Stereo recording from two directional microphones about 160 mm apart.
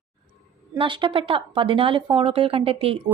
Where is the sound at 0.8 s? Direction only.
30° right (ahead or behind).